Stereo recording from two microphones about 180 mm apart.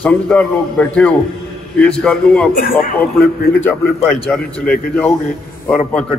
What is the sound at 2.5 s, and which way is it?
Speech, 50° left (ahead or behind).